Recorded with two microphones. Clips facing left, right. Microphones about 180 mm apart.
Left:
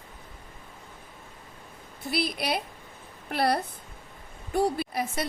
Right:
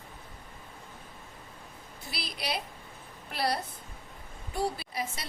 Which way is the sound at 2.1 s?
55° left (ahead or behind).